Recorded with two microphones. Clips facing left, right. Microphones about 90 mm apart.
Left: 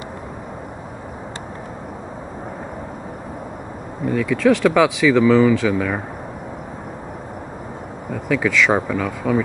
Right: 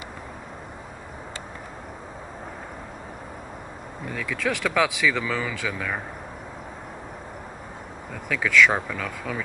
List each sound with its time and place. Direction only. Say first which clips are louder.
4.0 s speech: left 11 dB; 5° left (ahead or behind)
8.1 s speech: left 6 dB; 5° left (ahead or behind)